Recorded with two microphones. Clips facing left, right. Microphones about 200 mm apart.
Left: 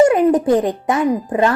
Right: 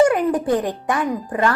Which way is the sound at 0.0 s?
25° left (ahead or behind).